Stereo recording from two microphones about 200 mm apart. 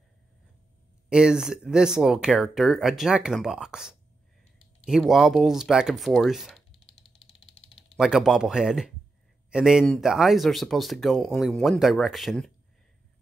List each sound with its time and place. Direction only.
1.0 s speech: 5° right (ahead or behind)
6.7 s a sound: 65° left (ahead or behind)
7.9 s speech: centre (ahead or behind)